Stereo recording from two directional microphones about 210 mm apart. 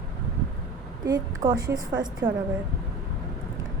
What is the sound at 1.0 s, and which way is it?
A woman's voice, 20° right (ahead or behind).